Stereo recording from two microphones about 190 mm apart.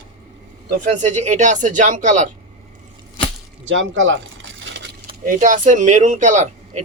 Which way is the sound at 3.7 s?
80° right.